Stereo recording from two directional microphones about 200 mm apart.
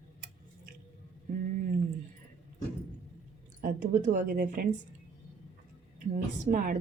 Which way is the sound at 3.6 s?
40° right (ahead or behind).